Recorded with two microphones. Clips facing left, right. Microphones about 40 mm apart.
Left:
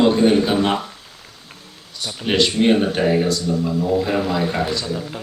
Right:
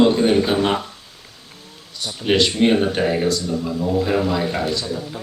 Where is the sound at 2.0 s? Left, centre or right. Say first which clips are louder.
Right 1 dB; centre.